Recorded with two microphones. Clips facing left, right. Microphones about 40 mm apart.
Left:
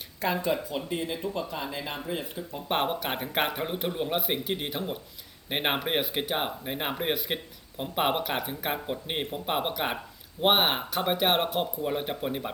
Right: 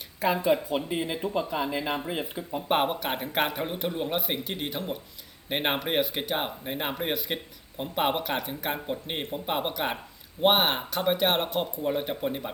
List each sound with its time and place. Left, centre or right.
0.2 s speech: centre
2.6 s speech: centre